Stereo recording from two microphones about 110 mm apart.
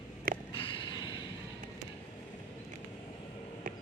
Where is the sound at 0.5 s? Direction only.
55° left (ahead or behind).